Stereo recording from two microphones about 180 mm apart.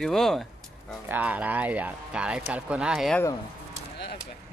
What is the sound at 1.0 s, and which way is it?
Speech, 10° right (ahead or behind).